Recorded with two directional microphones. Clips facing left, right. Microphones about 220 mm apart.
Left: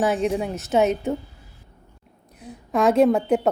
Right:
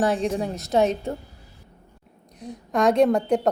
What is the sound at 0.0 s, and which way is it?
Speech, 5° left (ahead or behind).